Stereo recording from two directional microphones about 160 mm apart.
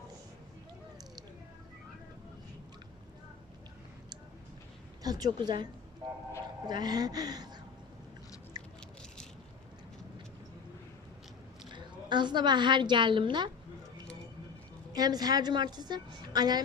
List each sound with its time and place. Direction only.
5.0 s a woman's voice: 25° right (ahead or behind)
6.7 s a woman's voice: 25° right (ahead or behind)
11.6 s a woman's voice: 30° right (ahead or behind)
14.9 s a woman's voice: 25° right (ahead or behind)